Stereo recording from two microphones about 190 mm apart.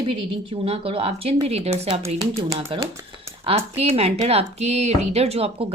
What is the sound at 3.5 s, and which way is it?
Speech, 30° right (ahead or behind).